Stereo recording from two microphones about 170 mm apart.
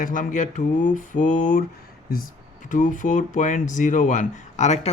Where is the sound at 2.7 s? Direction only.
50° left (ahead or behind).